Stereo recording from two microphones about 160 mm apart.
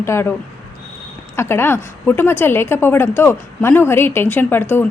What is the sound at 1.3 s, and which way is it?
A woman's voice, 15° left (ahead or behind).